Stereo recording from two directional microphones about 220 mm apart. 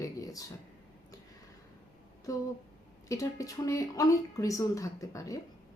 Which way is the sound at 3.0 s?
15° left (ahead or behind).